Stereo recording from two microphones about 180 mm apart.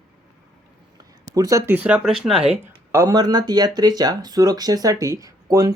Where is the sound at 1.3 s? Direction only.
20° right (ahead or behind); by 2.4 s centre (ahead or behind).